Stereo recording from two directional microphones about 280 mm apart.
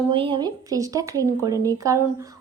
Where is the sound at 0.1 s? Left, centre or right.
Centre.